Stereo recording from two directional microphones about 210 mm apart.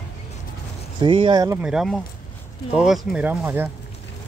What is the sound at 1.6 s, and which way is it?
Speech, 5° right (ahead or behind).